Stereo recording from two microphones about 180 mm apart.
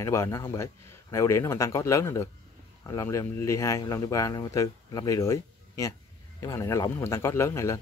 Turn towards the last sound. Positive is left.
turn(degrees=15)  # may be behind; listen again after turning